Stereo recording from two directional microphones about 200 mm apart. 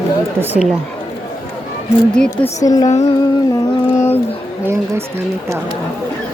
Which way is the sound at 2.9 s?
35° left (ahead or behind).